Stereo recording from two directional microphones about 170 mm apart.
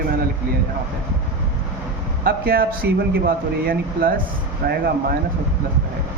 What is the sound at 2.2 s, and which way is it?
Speech, 60° right (ahead or behind).